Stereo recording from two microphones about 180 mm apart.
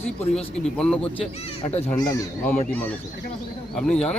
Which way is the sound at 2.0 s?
20° left (ahead or behind).